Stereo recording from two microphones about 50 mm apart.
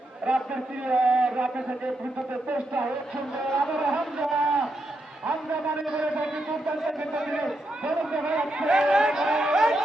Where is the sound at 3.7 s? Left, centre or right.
Centre.